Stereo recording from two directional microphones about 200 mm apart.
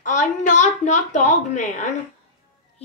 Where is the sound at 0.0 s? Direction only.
40° left (ahead or behind).